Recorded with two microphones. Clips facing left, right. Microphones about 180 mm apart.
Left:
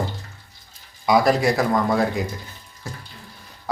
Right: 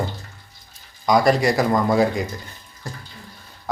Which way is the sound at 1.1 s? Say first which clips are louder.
Right 1 dB; 5° left (ahead or behind).